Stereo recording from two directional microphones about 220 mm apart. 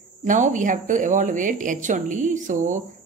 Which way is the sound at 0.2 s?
35° right (ahead or behind).